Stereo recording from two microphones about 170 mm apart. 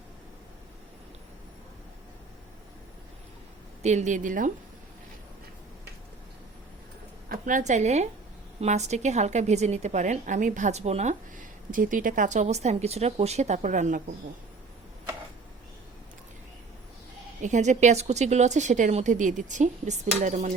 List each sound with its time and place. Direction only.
3.8 s a woman's voice: 45° right (ahead or behind)
7.3 s a woman's voice: 50° right (ahead or behind)
17.4 s a woman's voice: 45° right (ahead or behind)